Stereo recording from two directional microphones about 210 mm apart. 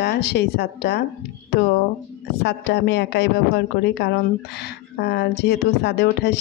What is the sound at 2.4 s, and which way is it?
A woman's voice, 55° left (ahead or behind).